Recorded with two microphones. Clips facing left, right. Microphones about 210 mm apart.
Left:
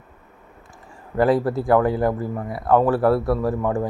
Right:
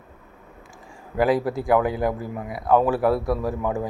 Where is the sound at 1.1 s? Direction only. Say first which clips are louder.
Left 2 dB; centre (ahead or behind).